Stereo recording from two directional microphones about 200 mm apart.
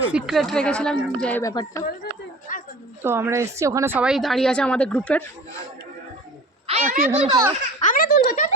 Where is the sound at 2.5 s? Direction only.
40° left (ahead or behind).